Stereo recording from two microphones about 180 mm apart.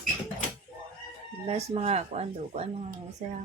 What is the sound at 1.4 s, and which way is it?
Speech, 35° right (ahead or behind).